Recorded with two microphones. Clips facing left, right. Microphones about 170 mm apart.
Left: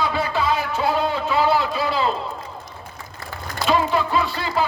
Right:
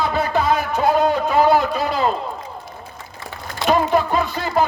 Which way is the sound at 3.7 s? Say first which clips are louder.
Right 3 dB; 50° right (ahead or behind).